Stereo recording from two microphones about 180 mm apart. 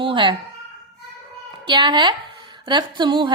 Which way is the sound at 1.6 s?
25° right (ahead or behind).